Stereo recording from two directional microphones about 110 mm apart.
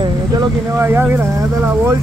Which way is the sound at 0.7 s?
20° right (ahead or behind).